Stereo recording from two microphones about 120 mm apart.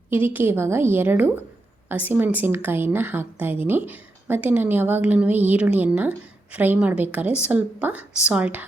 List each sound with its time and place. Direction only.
0.1 s a woman's voice: 15° right (ahead or behind)